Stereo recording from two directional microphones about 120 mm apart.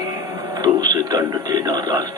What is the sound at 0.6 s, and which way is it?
Speech, 35° right (ahead or behind).